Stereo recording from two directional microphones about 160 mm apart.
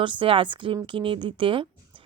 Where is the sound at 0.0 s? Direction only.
30° right (ahead or behind).